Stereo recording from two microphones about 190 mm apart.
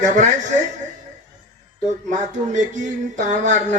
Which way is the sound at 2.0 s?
40° right (ahead or behind).